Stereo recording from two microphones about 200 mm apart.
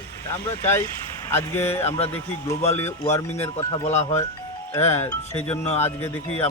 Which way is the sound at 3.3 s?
35° left (ahead or behind).